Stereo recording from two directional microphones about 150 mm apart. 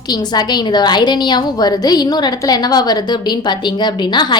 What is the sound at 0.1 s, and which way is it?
A woman's voice, 30° left (ahead or behind).